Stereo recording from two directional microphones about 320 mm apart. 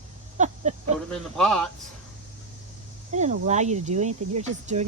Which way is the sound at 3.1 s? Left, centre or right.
Right.